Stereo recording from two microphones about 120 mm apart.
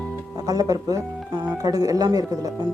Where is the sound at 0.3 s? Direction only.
30° right (ahead or behind).